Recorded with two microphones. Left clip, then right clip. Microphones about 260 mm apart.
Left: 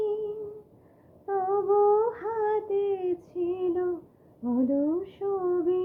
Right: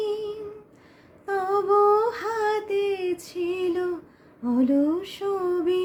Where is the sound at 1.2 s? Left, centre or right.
Right.